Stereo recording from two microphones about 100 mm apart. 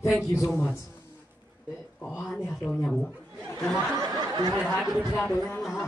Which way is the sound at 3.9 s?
40° right (ahead or behind).